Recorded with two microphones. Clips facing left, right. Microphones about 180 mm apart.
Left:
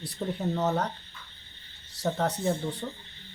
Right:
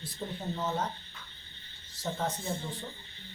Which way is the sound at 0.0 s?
70° left (ahead or behind).